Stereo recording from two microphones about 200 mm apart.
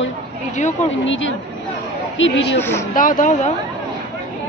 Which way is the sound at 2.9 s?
40° left (ahead or behind).